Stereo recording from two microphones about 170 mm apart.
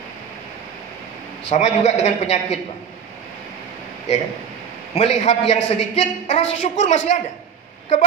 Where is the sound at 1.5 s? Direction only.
40° left (ahead or behind).